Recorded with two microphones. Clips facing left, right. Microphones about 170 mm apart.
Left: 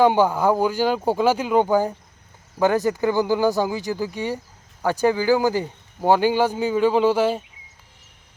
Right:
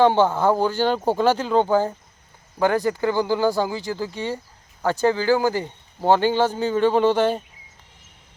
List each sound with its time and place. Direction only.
0.0 s speech: 10° left (ahead or behind)